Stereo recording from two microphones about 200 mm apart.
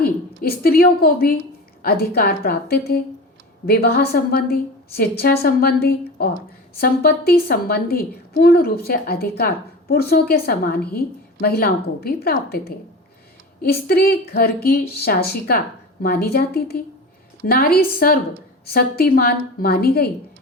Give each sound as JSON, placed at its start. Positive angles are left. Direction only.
{"t": 0.0, "sound": "a woman's voice", "side_deg": 50}